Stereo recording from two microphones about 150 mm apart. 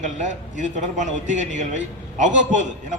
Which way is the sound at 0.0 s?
55° right (ahead or behind).